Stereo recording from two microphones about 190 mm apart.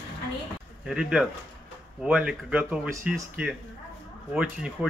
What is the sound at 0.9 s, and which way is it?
A man's voice, 5° right (ahead or behind).